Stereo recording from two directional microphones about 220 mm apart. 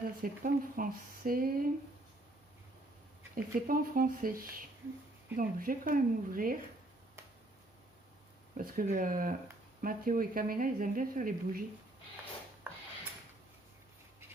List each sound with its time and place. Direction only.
0.2 s speech: 40° right (ahead or behind)
3.3 s speech: 40° right (ahead or behind)
8.5 s speech: 40° right (ahead or behind)